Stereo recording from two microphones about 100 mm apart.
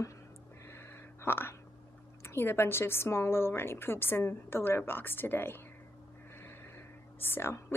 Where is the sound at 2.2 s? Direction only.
25° left (ahead or behind).